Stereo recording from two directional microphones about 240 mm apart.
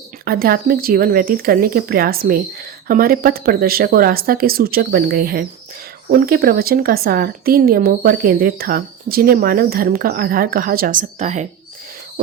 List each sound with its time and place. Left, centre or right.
0.3 s a woman's voice: right